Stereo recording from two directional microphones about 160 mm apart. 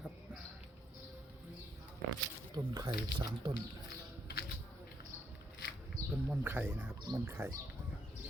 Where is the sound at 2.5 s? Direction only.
25° right (ahead or behind).